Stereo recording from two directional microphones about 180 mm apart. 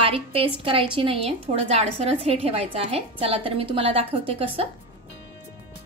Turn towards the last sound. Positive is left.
turn(degrees=-30)  # may be behind; listen again after turning